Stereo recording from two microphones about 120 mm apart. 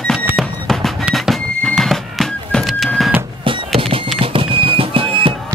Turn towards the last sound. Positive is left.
turn(degrees=-50)  # may be behind; listen again after turning